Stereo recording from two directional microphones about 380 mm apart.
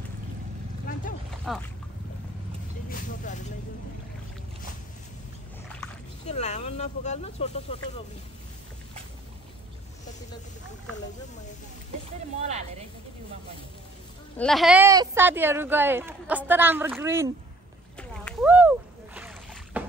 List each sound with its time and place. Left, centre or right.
0.9 s a sound: left
1.5 s speech: centre
2.9 s speech: centre
6.2 s speech: centre
14.4 s speech: centre
17.9 s boat: centre